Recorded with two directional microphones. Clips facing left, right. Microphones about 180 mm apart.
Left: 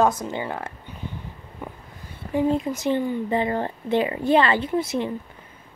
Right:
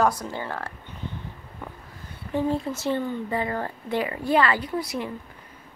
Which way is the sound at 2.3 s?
15° left (ahead or behind).